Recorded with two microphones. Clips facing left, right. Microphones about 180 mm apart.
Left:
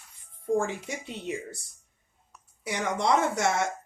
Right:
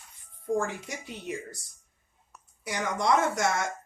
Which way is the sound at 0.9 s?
25° left (ahead or behind).